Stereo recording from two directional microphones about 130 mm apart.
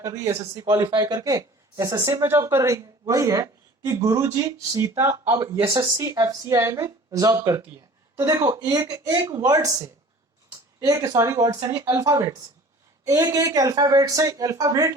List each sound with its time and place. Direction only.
0.0 s speech: 20° right (ahead or behind)
0.8 s speech: 35° right (ahead or behind)
2.2 s speech: 20° right (ahead or behind)
5.7 s speech: 30° right (ahead or behind)